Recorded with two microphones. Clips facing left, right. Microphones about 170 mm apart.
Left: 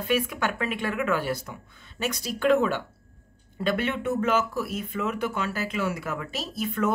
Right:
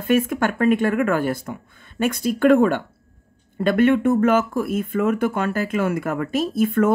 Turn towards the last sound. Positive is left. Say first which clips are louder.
# right 9 dB
turn(degrees=-50)  # may be behind; listen again after turning